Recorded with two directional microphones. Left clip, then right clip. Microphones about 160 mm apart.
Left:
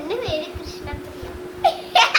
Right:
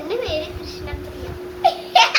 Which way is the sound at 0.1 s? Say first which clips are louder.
Right 1 dB; 20° left (ahead or behind).